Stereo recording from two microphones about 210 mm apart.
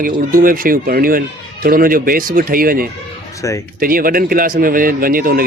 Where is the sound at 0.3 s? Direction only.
40° right (ahead or behind).